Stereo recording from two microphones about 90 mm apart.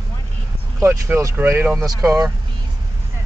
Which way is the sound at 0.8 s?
30° right (ahead or behind).